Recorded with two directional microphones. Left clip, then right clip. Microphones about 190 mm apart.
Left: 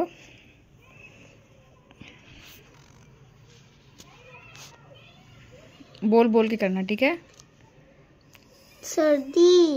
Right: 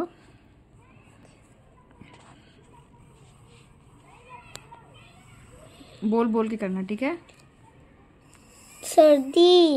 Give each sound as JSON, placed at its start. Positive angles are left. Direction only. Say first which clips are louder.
{"t": 5.9, "sound": "speech", "louder": "left 5 dB", "side_deg": 15}
{"t": 8.8, "sound": "a child's voice", "louder": "right 6 dB", "side_deg": -35}
{"t": 9.3, "sound": "a child's voice", "louder": "right 1 dB", "side_deg": -60}